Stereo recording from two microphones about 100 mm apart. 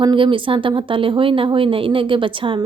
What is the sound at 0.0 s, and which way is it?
A woman's voice, 55° right (ahead or behind).